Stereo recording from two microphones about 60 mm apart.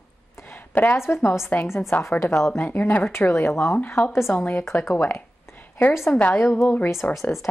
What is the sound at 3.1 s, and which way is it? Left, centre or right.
A woman's voice, left.